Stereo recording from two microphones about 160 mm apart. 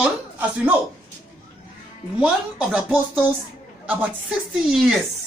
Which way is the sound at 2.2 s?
10° right (ahead or behind).